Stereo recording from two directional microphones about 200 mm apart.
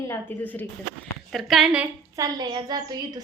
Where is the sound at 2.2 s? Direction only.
20° right (ahead or behind).